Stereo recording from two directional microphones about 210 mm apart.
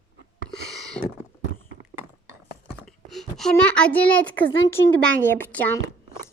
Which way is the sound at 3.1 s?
Centre (ahead or behind).